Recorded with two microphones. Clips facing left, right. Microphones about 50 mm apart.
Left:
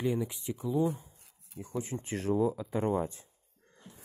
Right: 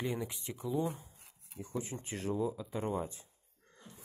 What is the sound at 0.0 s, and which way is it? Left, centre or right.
Speech, centre.